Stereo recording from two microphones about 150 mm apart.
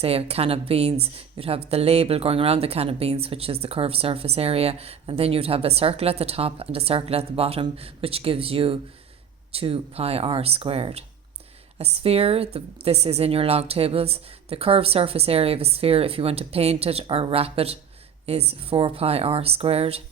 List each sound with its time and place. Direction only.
0.0 s speech: 40° right (ahead or behind)